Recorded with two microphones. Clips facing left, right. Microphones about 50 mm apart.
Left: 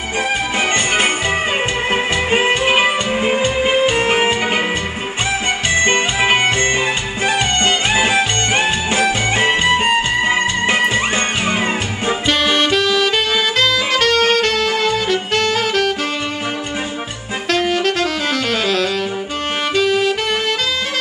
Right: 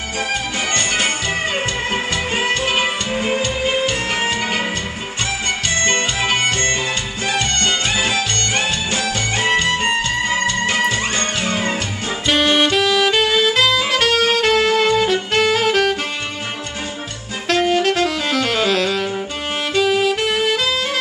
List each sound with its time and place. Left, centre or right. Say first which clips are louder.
1.9 s music: left 4 dB; left
5.8 s music: left 4 dB; centre
12.3 s saxophone: right 1 dB; centre
17.5 s saxophone: right 1 dB; centre